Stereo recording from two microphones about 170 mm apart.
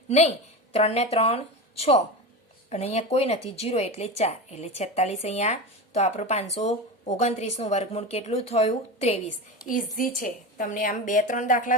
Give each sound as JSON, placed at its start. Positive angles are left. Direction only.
{"t": 0.7, "sound": "a woman's voice", "side_deg": 35}
{"t": 9.6, "sound": "a woman's voice", "side_deg": 50}